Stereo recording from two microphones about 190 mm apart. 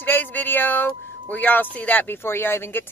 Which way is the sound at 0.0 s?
10° left (ahead or behind).